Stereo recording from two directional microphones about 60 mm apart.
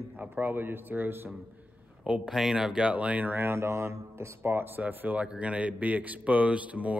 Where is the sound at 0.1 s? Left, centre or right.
Right.